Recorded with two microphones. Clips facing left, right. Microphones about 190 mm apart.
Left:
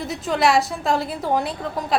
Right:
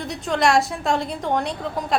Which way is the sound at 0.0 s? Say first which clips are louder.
Left 1 dB; centre (ahead or behind).